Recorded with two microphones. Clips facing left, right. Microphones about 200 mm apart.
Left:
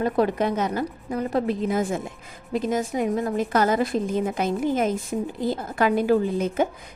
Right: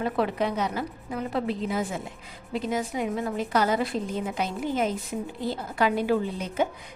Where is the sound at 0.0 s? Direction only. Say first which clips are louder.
Left 4 dB; 45° left (ahead or behind).